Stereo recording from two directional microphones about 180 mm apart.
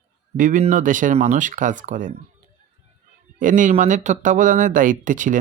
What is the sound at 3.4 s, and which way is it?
Speech, 45° right (ahead or behind).